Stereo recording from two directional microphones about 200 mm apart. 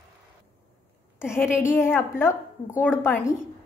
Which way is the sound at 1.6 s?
10° left (ahead or behind).